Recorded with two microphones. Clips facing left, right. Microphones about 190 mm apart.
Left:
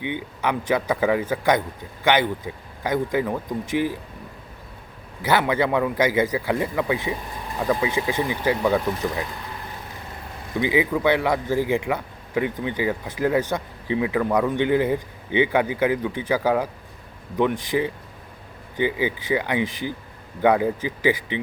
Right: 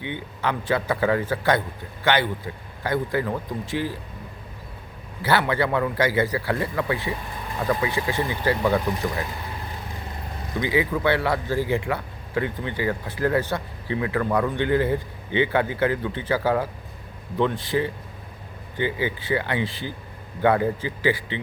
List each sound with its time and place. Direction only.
0.0 s speech: 15° left (ahead or behind)
5.2 s speech: 15° left (ahead or behind)
10.6 s speech: 15° left (ahead or behind)